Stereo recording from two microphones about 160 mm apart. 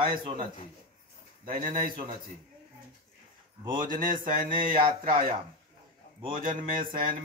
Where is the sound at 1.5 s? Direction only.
60° right (ahead or behind).